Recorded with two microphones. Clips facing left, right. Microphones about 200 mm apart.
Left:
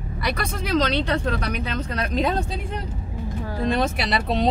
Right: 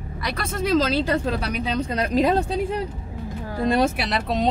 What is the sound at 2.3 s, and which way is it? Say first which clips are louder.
Speech: right 4 dB; 40° right (ahead or behind).